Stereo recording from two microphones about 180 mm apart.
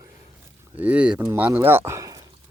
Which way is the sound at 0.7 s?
10° right (ahead or behind).